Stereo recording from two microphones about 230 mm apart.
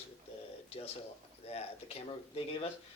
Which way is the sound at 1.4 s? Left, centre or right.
Left.